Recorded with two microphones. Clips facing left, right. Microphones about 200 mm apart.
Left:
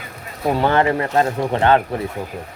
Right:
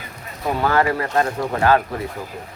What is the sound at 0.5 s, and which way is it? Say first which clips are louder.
Speech: left 2 dB; 25° left (ahead or behind).